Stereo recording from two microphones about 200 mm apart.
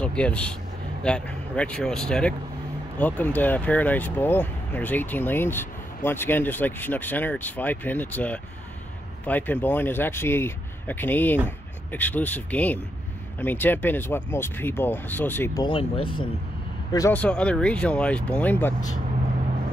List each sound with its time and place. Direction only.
0.0 s speech: 5° left (ahead or behind)
15.6 s speech: 25° left (ahead or behind)
16.9 s speech: 10° left (ahead or behind)